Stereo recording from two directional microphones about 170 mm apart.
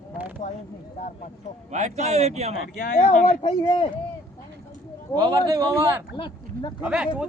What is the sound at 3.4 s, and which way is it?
Speech, 30° left (ahead or behind).